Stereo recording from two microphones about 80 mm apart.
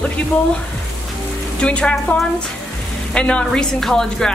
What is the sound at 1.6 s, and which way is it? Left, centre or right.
Speech, centre.